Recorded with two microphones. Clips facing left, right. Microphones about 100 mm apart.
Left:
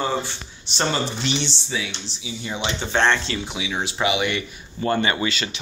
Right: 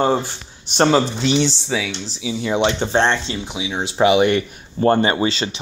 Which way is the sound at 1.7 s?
90° right.